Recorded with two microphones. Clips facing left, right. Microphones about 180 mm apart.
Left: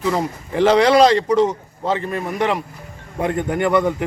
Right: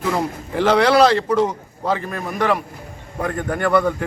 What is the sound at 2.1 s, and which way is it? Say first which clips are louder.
A man's voice: even; 20° left (ahead or behind).